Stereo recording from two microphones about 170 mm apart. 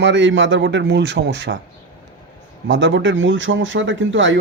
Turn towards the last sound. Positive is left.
turn(degrees=-90)